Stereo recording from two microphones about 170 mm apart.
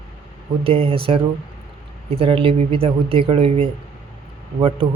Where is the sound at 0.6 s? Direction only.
35° right (ahead or behind).